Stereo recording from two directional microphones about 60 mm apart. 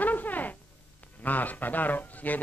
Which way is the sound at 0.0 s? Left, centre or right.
Left.